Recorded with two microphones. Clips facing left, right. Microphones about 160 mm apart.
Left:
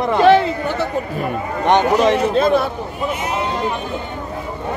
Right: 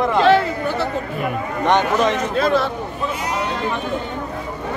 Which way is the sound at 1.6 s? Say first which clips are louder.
Left 3 dB; 30° left (ahead or behind).